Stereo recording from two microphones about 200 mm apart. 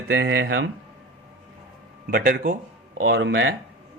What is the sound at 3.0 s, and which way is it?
Speech, 60° right (ahead or behind).